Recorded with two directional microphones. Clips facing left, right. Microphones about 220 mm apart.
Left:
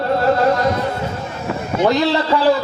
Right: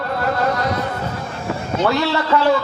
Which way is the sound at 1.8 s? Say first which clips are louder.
Left 3 dB; 15° left (ahead or behind).